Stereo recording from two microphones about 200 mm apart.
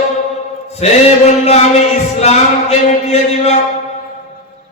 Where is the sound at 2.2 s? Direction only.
35° left (ahead or behind).